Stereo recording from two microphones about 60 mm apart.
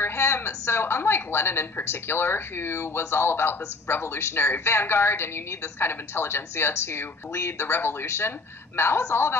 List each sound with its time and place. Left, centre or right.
0.0 s speech: left